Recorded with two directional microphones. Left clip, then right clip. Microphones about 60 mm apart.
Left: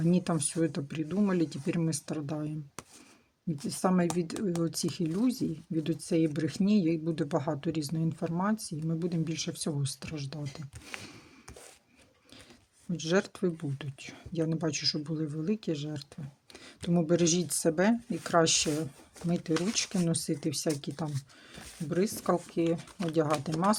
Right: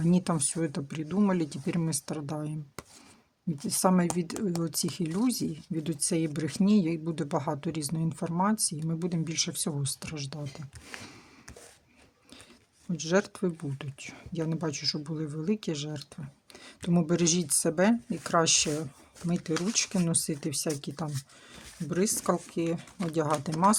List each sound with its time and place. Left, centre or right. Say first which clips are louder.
0.0 s speech: right 1 dB; right
13.0 s speech: right 1 dB; right
21.5 s speech: left 1 dB; right